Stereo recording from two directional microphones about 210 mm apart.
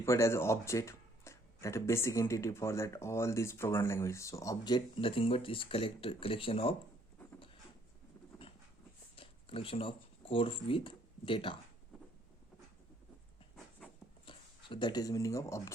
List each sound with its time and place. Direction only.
0.0 s speech: 15° left (ahead or behind)
9.1 s speech: 25° left (ahead or behind)
14.3 s speech: 25° left (ahead or behind)